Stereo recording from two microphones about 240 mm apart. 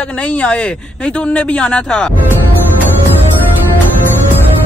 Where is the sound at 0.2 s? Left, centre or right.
Centre.